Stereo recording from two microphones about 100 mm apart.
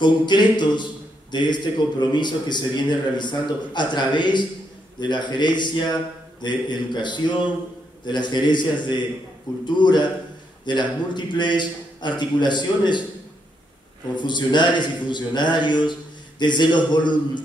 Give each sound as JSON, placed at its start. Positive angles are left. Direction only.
{"t": 0.0, "sound": "a man's voice", "side_deg": 50}
{"t": 14.1, "sound": "a man's voice", "side_deg": 50}